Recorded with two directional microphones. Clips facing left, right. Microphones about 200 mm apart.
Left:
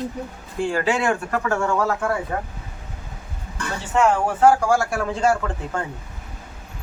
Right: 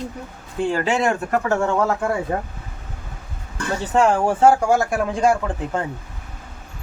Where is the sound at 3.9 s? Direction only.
30° right (ahead or behind); by 5.8 s 15° right (ahead or behind).